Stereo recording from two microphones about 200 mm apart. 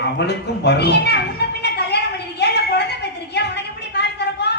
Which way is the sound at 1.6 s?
55° left (ahead or behind).